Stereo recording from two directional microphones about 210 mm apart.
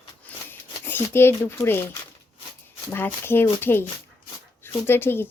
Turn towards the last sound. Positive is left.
turn(degrees=10)  # may be behind; listen again after turning